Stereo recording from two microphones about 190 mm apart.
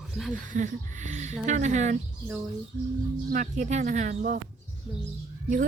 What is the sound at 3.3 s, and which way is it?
Speech, 40° right (ahead or behind).